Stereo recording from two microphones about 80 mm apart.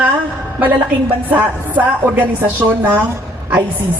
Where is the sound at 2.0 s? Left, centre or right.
Right.